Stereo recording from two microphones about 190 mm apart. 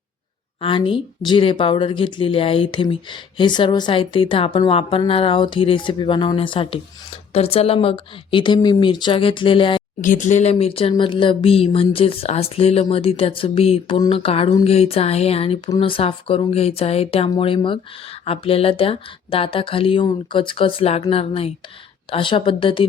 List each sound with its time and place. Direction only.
0.6 s speech: 30° left (ahead or behind)
10.0 s speech: 40° left (ahead or behind)